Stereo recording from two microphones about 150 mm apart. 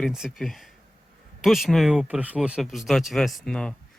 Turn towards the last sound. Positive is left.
turn(degrees=5)  # may be behind; listen again after turning